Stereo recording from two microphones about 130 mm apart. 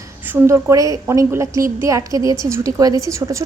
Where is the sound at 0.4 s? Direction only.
25° right (ahead or behind).